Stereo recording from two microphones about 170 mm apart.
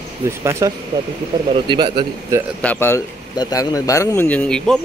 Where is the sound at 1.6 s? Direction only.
30° right (ahead or behind).